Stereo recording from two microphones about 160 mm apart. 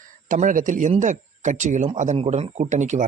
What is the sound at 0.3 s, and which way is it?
A man's voice, 55° right (ahead or behind).